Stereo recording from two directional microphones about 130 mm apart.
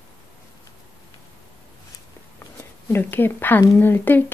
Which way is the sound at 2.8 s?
15° left (ahead or behind).